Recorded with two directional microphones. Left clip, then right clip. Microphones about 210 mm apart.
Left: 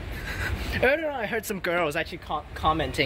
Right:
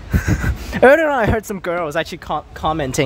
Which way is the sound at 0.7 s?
35° right (ahead or behind).